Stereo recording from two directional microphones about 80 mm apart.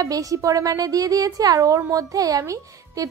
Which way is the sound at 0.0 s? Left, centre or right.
Right.